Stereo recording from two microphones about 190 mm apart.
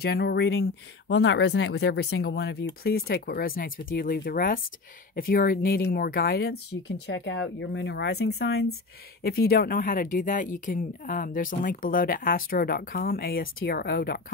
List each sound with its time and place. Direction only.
0.0 s a woman's voice: 60° left (ahead or behind)